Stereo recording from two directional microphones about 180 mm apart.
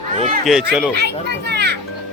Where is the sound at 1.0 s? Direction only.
70° right (ahead or behind).